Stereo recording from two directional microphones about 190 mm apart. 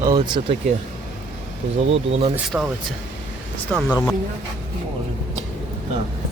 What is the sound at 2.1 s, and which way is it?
Speech, 30° right (ahead or behind).